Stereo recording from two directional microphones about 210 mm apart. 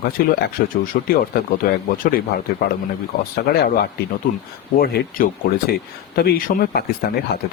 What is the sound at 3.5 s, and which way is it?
Speech, 45° left (ahead or behind).